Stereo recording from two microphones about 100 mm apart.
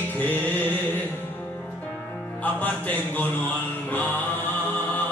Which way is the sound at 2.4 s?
15° left (ahead or behind).